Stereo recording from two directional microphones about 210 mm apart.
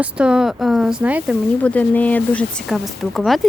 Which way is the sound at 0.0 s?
5° right (ahead or behind).